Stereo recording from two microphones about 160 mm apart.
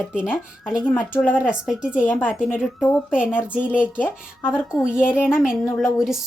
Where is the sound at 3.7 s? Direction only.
10° left (ahead or behind).